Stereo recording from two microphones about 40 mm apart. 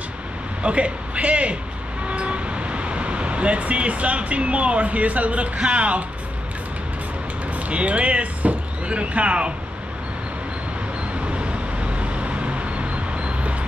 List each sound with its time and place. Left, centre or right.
0.6 s speech: right
7.5 s speech: right
11.2 s vehicle: right